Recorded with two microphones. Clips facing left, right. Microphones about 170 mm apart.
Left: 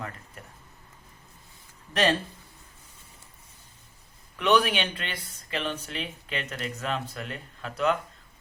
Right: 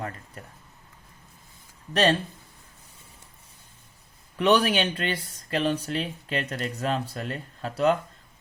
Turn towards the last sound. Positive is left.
turn(degrees=-35)  # may be behind; listen again after turning